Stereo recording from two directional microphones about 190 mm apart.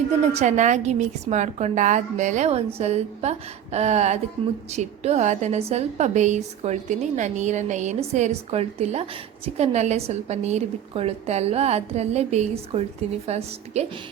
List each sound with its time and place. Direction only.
0.3 s a woman's voice: 40° right (ahead or behind)